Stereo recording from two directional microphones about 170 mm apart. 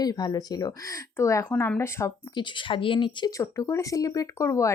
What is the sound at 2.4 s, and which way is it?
Speech, 30° left (ahead or behind).